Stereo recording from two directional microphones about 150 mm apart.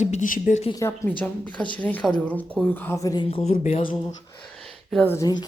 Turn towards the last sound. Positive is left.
turn(degrees=25)  # may be behind; listen again after turning